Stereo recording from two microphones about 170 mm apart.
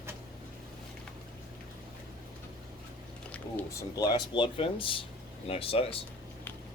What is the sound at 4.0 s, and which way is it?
Speech, 25° left (ahead or behind).